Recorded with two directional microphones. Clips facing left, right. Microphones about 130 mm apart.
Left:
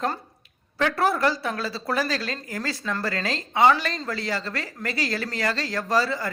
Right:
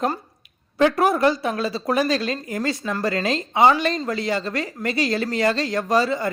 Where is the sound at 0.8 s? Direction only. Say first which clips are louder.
Right 5 dB; 20° right (ahead or behind).